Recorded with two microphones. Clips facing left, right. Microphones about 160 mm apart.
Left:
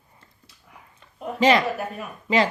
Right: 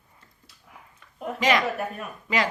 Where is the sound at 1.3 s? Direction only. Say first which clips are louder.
Left 5 dB; 30° left (ahead or behind).